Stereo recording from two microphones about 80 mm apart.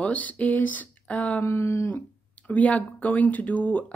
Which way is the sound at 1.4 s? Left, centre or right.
Left.